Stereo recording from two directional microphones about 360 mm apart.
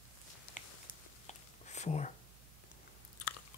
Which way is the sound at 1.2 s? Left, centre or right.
Centre.